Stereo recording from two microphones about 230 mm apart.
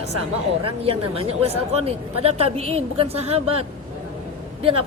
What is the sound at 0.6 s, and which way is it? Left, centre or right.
Speech, right.